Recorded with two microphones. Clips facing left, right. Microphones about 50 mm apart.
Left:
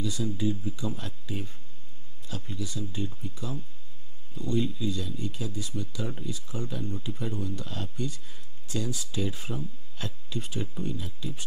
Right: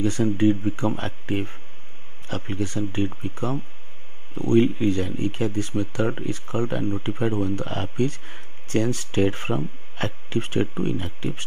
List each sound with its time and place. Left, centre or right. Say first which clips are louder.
0.0 s speech: right 9 dB; right